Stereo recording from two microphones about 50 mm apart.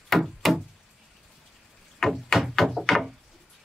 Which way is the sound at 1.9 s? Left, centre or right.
Centre.